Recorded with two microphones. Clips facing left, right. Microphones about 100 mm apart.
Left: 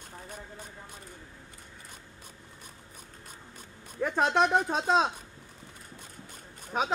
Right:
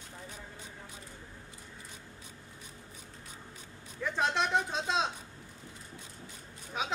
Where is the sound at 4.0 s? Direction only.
50° left (ahead or behind).